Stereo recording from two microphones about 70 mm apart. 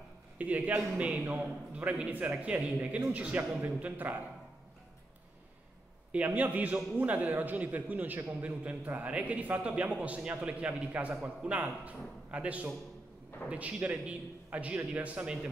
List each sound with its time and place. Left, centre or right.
0.4 s a man's voice: right
6.1 s a man's voice: right